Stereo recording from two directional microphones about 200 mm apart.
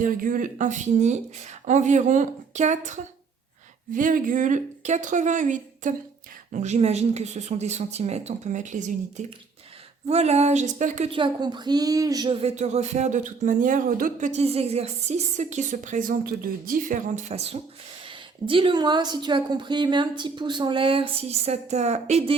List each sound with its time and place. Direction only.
0.0 s a woman's voice: 40° right (ahead or behind)